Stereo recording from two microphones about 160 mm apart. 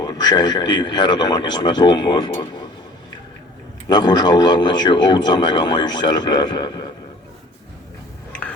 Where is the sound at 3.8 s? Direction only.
25° left (ahead or behind).